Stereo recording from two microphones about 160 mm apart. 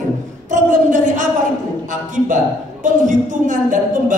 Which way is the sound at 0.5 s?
50° right (ahead or behind).